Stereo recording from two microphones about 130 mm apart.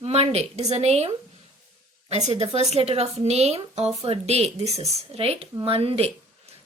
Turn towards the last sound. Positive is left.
turn(degrees=-50)  # may be behind; listen again after turning